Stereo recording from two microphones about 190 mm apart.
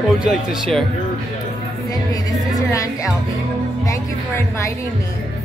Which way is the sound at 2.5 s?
20° left (ahead or behind).